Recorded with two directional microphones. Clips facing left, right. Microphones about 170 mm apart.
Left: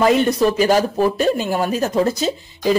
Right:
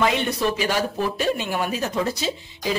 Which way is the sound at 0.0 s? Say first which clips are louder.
Left 7 dB; 40° left (ahead or behind).